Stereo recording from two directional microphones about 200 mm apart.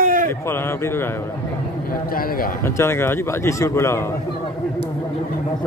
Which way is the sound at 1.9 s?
45° left (ahead or behind).